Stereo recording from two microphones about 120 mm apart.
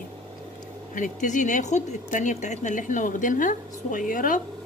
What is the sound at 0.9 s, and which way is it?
Speech, 90° left.